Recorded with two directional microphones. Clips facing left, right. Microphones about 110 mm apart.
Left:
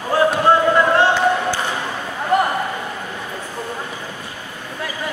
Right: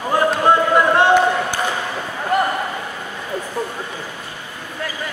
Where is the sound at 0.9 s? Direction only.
15° right (ahead or behind).